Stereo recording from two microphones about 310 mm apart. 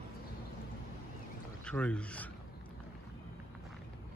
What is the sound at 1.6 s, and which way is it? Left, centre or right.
Speech, centre.